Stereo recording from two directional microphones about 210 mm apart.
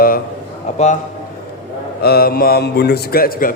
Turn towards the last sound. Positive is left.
turn(degrees=45)  # may be behind; listen again after turning